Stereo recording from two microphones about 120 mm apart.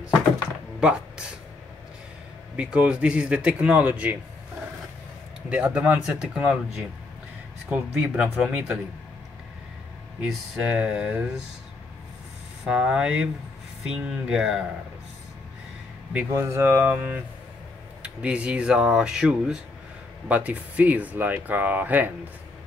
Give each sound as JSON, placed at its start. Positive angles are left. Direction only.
{"t": 0.7, "sound": "a sound", "side_deg": -5}
{"t": 2.5, "sound": "speech", "side_deg": -10}
{"t": 5.5, "sound": "speech", "side_deg": -10}
{"t": 10.2, "sound": "speech", "side_deg": -10}
{"t": 12.6, "sound": "speech", "side_deg": -5}
{"t": 16.1, "sound": "speech", "side_deg": -15}